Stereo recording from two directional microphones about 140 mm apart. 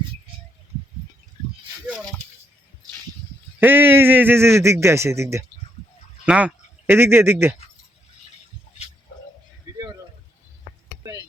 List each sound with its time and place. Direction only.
3.6 s a man's voice: 15° right (ahead or behind)